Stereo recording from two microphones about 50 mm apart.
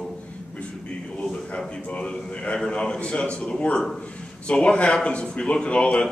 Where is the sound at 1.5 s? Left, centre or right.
Left.